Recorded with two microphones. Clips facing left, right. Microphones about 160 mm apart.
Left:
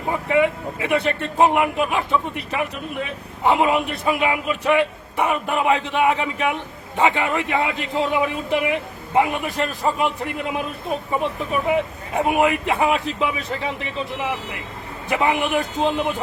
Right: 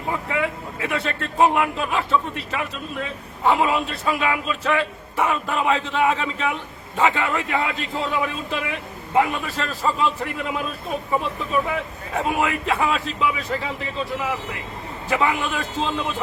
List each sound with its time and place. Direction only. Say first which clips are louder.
0.1 s speech: left 6 dB; 20° left (ahead or behind)